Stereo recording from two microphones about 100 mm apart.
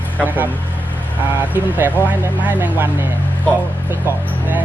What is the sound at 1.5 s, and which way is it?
Speech, 20° right (ahead or behind).